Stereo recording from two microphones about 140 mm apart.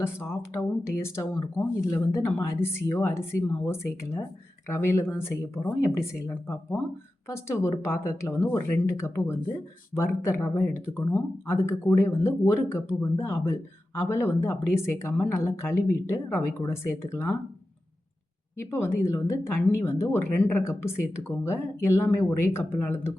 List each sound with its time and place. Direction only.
0.0 s speech: 15° left (ahead or behind)
18.5 s speech: 20° left (ahead or behind)